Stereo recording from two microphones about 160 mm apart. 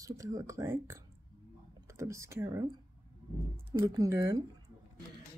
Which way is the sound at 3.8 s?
20° right (ahead or behind).